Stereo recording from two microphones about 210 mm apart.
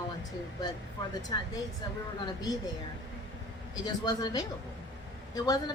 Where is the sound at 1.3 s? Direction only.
20° left (ahead or behind).